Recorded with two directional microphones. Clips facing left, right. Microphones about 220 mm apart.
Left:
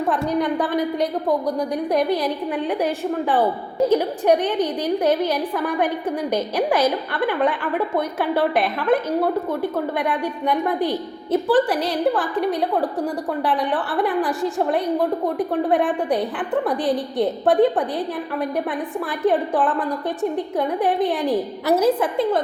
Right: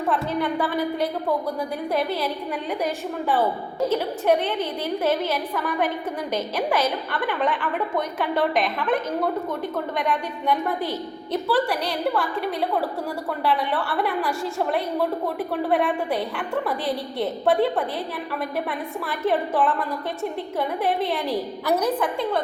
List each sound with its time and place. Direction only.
1.9 s a woman's voice: 15° left (ahead or behind)
3.8 s a woman's voice: 15° left (ahead or behind)
7.4 s a woman's voice: 10° left (ahead or behind)
10.0 s a woman's voice: 10° left (ahead or behind)
15.4 s a woman's voice: 15° left (ahead or behind)
19.2 s a woman's voice: 15° left (ahead or behind)
20.7 s a woman's voice: 15° left (ahead or behind)
21.8 s a woman's voice: 25° left (ahead or behind)